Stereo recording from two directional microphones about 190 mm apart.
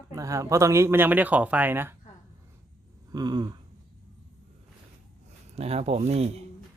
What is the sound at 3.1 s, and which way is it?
Speech, 20° right (ahead or behind).